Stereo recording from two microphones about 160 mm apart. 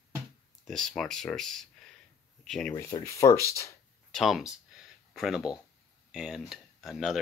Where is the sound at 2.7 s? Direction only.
20° left (ahead or behind).